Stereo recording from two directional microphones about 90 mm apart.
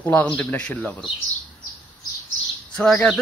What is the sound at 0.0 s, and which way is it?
Speech, 15° left (ahead or behind).